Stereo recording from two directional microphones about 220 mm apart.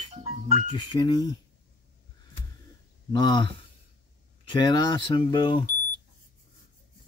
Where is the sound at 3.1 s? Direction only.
20° left (ahead or behind).